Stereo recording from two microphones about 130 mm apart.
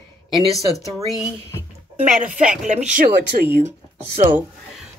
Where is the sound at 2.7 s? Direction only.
65° right (ahead or behind).